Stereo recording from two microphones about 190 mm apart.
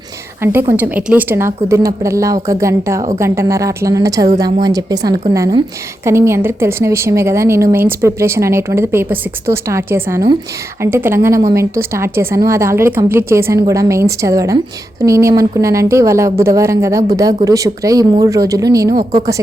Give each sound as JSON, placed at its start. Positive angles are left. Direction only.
{"t": 0.4, "sound": "a woman's voice", "side_deg": -15}